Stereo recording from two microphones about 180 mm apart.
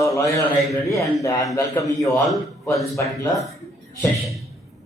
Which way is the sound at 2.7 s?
15° left (ahead or behind).